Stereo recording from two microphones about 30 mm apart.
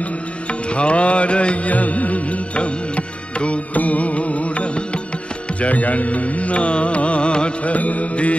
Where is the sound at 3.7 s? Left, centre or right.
Left.